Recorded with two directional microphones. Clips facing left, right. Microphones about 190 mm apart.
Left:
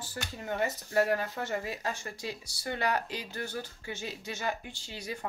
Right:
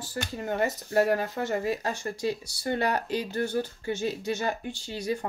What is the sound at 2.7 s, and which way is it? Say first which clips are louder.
Speech: right 3 dB; 30° right (ahead or behind).